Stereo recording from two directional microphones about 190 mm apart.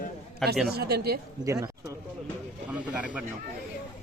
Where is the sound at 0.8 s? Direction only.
55° right (ahead or behind).